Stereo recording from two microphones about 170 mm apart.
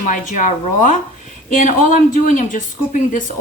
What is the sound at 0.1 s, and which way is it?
Speech, 50° left (ahead or behind).